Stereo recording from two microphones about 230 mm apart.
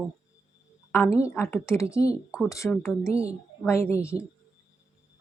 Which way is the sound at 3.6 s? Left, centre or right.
Centre.